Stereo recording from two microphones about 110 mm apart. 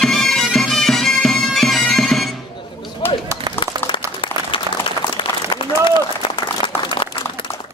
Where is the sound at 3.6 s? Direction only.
50° left (ahead or behind).